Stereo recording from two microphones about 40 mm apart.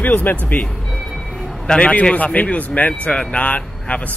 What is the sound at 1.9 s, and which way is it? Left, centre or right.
Speech, left.